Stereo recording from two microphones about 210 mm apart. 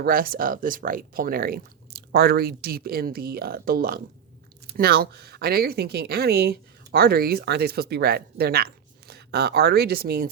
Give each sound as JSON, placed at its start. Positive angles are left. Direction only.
{"t": 0.0, "sound": "speech", "side_deg": -45}